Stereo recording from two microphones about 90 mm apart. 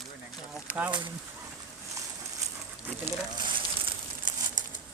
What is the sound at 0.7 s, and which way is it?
Speech, 15° right (ahead or behind).